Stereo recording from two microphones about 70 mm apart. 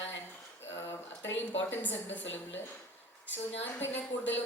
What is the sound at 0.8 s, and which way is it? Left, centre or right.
A woman's voice, left.